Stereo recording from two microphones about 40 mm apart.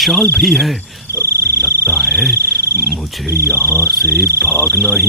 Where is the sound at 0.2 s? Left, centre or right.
Left.